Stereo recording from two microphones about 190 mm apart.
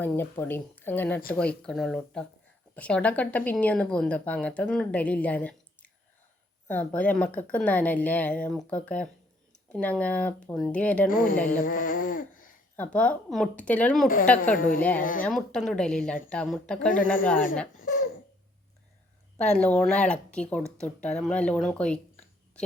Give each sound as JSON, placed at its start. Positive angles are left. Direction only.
{"t": 0.0, "sound": "speech", "side_deg": 10}
{"t": 11.1, "sound": "speech", "side_deg": 45}
{"t": 11.6, "sound": "a sound", "side_deg": 45}
{"t": 12.7, "sound": "speech", "side_deg": 10}
{"t": 14.5, "sound": "speech", "side_deg": 45}
{"t": 15.2, "sound": "speech", "side_deg": 5}
{"t": 17.8, "sound": "laughter", "side_deg": 45}
{"t": 19.5, "sound": "speech", "side_deg": 5}